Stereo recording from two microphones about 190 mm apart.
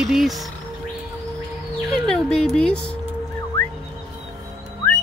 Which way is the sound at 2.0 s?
Centre (ahead or behind).